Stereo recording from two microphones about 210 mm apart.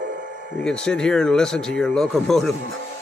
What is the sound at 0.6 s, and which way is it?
Speech, 5° left (ahead or behind).